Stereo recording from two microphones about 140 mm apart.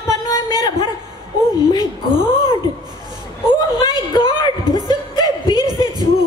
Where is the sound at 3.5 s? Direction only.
30° left (ahead or behind).